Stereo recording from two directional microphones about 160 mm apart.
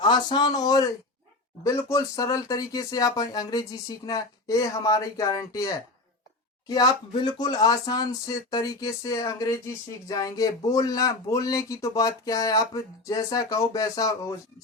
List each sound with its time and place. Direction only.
0.0 s speech: 30° left (ahead or behind)